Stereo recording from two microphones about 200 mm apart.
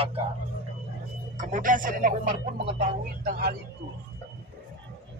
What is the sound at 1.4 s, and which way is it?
A man's voice, 40° right (ahead or behind).